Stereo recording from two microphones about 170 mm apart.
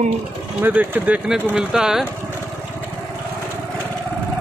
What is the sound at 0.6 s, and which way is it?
Speech, 10° right (ahead or behind).